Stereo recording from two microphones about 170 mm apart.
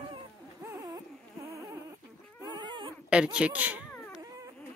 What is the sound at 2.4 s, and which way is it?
Dog, 25° right (ahead or behind).